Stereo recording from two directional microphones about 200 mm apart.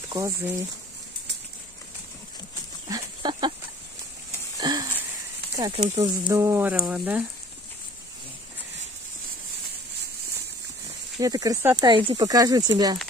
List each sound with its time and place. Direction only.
0.1 s speech: 15° right (ahead or behind)
2.9 s a sound: 20° right (ahead or behind)
4.6 s wheeze: 20° right (ahead or behind)
5.6 s speech: 20° right (ahead or behind)
11.1 s speech: 15° right (ahead or behind)